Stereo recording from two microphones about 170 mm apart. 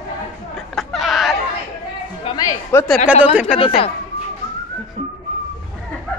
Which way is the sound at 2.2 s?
20° left (ahead or behind).